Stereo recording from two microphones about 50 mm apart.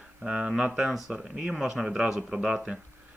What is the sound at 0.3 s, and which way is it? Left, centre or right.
Speech, centre.